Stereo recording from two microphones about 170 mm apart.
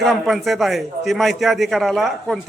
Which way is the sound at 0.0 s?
Centre (ahead or behind).